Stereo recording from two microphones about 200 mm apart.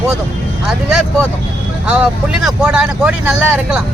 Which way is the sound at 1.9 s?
5° right (ahead or behind).